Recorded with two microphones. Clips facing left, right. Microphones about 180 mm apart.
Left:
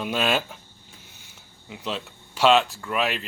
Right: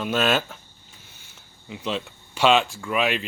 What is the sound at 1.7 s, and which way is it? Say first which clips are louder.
Speech: right 3 dB; centre (ahead or behind).